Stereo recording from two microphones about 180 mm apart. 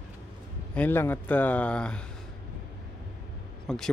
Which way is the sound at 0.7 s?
10° left (ahead or behind).